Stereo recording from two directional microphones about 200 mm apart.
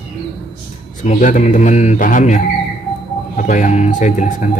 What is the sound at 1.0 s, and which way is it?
Speech, 35° left (ahead or behind).